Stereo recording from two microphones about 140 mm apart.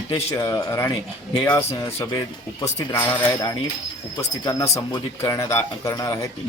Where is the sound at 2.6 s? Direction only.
15° left (ahead or behind).